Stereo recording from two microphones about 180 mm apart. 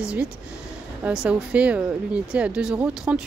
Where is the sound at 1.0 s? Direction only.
5° right (ahead or behind).